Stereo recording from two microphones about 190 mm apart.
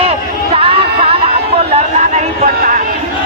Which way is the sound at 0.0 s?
30° right (ahead or behind).